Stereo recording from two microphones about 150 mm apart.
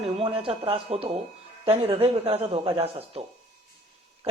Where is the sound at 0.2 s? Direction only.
40° right (ahead or behind).